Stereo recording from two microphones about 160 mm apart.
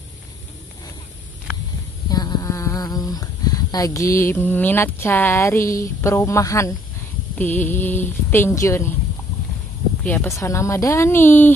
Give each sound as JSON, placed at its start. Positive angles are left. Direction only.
{"t": 2.0, "sound": "a woman's voice", "side_deg": 25}
{"t": 10.0, "sound": "a woman's voice", "side_deg": 15}